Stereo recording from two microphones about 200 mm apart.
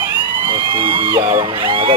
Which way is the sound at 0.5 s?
25° right (ahead or behind).